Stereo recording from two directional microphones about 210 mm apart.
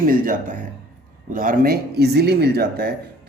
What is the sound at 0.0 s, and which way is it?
A man's voice, 40° right (ahead or behind).